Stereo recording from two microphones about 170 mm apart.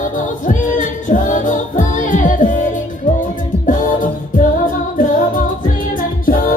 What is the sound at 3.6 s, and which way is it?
Music, 50° left (ahead or behind).